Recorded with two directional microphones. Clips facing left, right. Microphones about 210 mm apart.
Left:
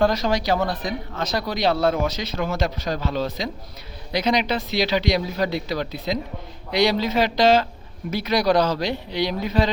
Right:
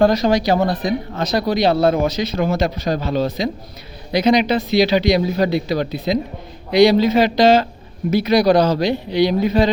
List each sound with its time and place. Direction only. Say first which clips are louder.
0.0 s speech: right 6 dB; 15° right (ahead or behind)
0.5 s speech: right 5 dB; 45° right (ahead or behind)
1.2 s speech: right 5 dB; 15° right (ahead or behind)